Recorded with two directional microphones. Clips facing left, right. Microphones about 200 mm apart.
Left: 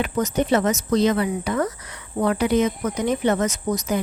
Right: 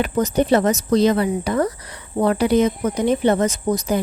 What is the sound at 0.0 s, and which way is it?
Speech, 35° right (ahead or behind).